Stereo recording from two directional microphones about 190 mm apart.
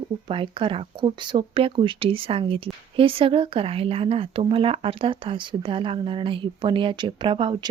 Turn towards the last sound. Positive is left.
turn(degrees=-25)  # may be behind; listen again after turning